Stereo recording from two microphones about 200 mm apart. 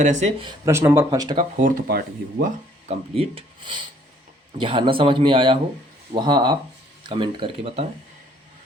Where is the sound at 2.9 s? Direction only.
30° right (ahead or behind).